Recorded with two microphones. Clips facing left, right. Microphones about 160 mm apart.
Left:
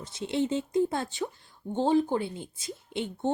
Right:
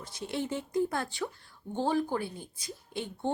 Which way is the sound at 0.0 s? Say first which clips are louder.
Left 6 dB; 25° left (ahead or behind).